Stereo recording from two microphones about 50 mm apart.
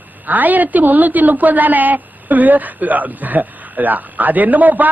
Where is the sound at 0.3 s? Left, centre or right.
Right.